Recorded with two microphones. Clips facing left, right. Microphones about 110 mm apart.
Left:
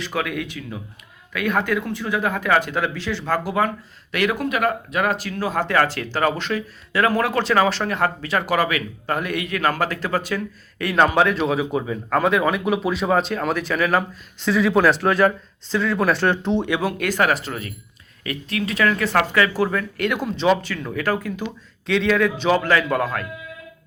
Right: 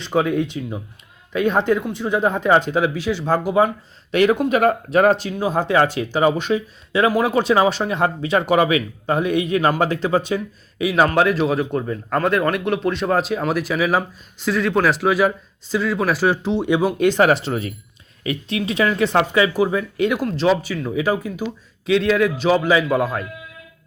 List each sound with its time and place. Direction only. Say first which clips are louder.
0.0 s speech: right 6 dB; 25° right (ahead or behind)
5.3 s speech: right 3 dB; 15° right (ahead or behind)
10.8 s a man's voice: right 1 dB; 5° right (ahead or behind)
16.6 s speech: right 6 dB; 15° right (ahead or behind)
20.2 s a man's voice: right 1 dB; centre (ahead or behind)